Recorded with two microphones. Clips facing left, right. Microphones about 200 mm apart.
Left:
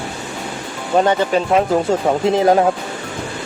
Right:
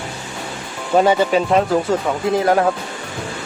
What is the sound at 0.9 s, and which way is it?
Speech, 5° right (ahead or behind).